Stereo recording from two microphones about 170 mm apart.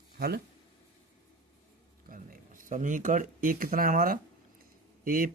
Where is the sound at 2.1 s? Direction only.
55° right (ahead or behind).